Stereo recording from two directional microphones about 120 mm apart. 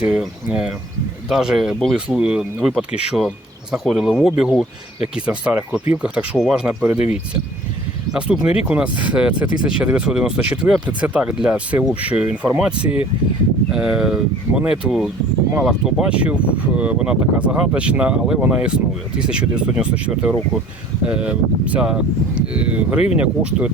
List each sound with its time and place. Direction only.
0.0 s speech: 10° right (ahead or behind)
8.1 s speech: 10° right (ahead or behind)